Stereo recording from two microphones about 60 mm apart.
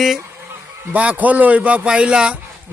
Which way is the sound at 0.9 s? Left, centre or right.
Right.